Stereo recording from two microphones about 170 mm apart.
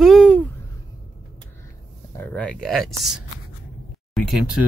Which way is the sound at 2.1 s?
5° left (ahead or behind).